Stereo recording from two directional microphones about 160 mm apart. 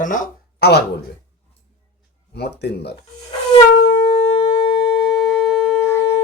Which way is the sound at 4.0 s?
45° left (ahead or behind).